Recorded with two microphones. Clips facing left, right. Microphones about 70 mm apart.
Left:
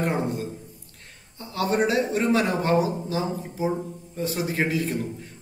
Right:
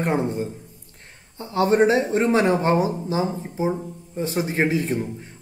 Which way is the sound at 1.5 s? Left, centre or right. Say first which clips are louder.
Right 6 dB; right.